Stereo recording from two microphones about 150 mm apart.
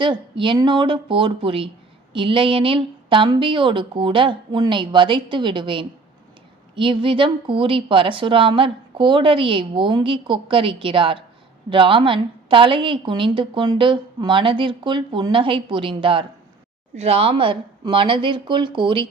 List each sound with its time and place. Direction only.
0.0 s a woman's voice: 35° right (ahead or behind)